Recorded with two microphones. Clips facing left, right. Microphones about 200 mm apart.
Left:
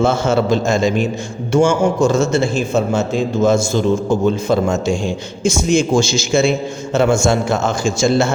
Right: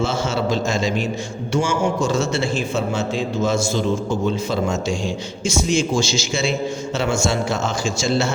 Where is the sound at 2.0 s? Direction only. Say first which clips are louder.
Left 5 dB; 45° left (ahead or behind).